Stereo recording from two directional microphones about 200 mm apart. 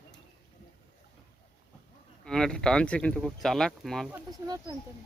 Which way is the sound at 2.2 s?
5° left (ahead or behind).